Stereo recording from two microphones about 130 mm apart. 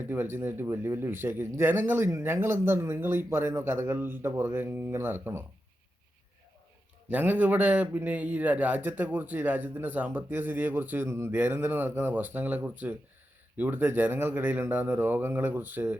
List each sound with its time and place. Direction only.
0.0 s a man's voice: 15° right (ahead or behind)
7.1 s a man's voice: 15° right (ahead or behind)